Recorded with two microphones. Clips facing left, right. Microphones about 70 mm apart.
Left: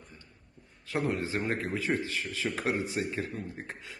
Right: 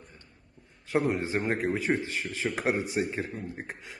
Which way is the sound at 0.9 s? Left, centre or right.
Right.